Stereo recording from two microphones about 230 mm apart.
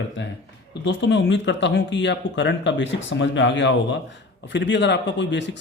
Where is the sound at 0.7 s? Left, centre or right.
Left.